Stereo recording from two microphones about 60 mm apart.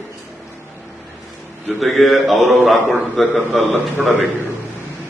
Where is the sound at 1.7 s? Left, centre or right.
Centre.